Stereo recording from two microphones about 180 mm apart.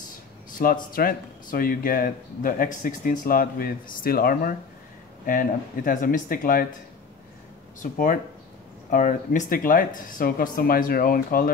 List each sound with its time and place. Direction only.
0.6 s speech: 55° left (ahead or behind)
7.8 s speech: 50° left (ahead or behind)